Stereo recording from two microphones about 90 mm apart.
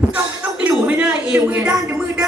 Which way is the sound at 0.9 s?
15° right (ahead or behind).